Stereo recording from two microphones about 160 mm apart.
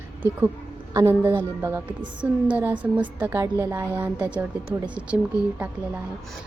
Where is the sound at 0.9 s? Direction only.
15° right (ahead or behind).